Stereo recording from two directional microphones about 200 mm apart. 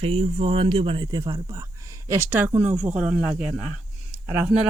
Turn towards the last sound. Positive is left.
turn(degrees=-5)  # may be behind; listen again after turning